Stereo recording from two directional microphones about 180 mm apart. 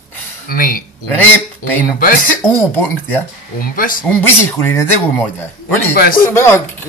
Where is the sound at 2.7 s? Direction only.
10° left (ahead or behind).